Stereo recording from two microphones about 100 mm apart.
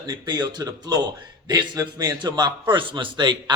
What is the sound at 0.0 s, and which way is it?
A man's voice, 45° right (ahead or behind).